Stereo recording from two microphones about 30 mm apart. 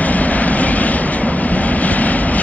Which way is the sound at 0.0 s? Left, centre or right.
Left.